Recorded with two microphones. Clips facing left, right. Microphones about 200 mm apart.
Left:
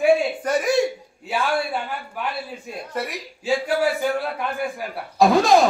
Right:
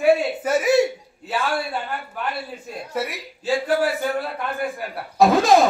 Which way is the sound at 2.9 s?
5° right (ahead or behind).